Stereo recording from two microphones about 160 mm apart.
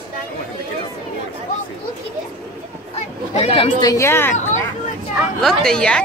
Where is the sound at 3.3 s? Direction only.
35° left (ahead or behind).